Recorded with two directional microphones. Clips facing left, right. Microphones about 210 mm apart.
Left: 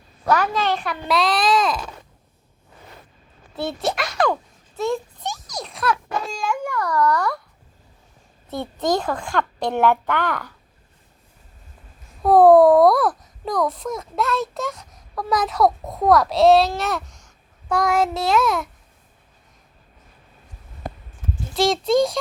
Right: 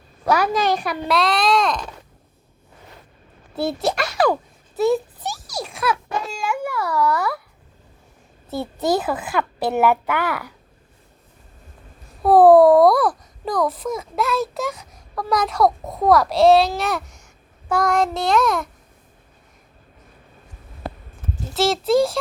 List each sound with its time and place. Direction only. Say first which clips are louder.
0.3 s a woman's voice: right 2 dB; 10° right (ahead or behind)
1.0 s a child's voice: even; centre (ahead or behind)
3.6 s a child's voice: right 3 dB; centre (ahead or behind)
8.4 s a woman's voice: right 1 dB; 5° right (ahead or behind)
12.2 s a child's voice: right 1 dB; 5° right (ahead or behind)
21.5 s a child's voice: even; centre (ahead or behind)